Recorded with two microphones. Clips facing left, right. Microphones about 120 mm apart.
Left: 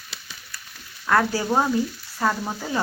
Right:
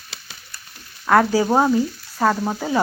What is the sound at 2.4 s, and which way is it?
Stir, 25° right (ahead or behind).